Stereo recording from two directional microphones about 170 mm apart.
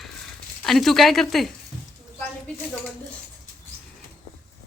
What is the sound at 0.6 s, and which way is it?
Speech, centre (ahead or behind).